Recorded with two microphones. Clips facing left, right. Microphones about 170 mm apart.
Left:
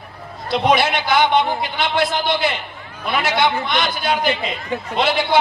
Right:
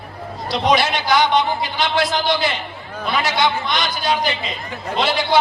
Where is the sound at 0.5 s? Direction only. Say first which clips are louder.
Left 1 dB; 55° left (ahead or behind).